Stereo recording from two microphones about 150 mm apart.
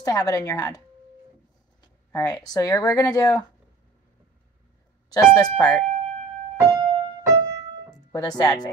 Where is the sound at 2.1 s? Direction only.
20° left (ahead or behind).